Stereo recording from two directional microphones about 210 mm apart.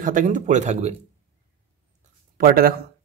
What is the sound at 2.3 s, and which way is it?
Speech, 45° right (ahead or behind).